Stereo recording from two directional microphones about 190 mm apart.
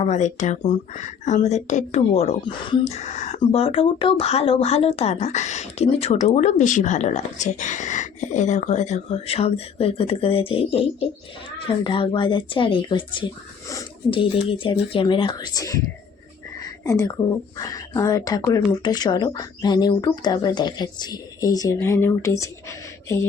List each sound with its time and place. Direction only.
0.0 s speech: 35° left (ahead or behind); by 15.8 s 20° left (ahead or behind)
16.6 s a sound: 15° left (ahead or behind)
17.6 s speech: 15° left (ahead or behind)